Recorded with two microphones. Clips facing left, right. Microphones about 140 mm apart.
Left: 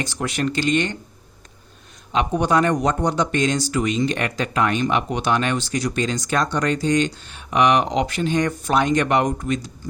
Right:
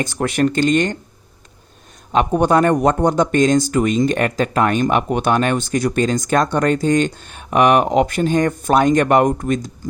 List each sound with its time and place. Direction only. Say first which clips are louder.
0.0 s speech: right 6 dB; 50° right (ahead or behind)
2.1 s speech: right 4 dB; 50° right (ahead or behind)